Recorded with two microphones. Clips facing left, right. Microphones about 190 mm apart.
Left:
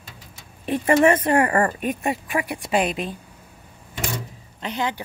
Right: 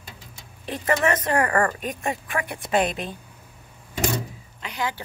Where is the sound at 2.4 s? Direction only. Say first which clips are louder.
Right 1 dB; 5° left (ahead or behind).